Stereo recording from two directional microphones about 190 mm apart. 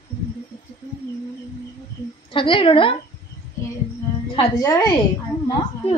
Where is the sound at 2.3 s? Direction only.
25° left (ahead or behind).